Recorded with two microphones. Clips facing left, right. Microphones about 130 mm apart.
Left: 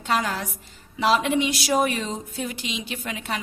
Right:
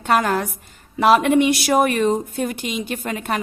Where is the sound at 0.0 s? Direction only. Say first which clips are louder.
Right 6 dB; 55° right (ahead or behind).